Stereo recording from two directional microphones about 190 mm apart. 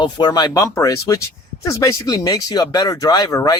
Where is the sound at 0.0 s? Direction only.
20° left (ahead or behind).